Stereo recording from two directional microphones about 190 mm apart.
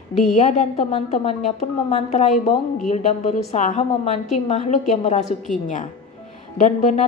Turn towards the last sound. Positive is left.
turn(degrees=35)  # may be behind; listen again after turning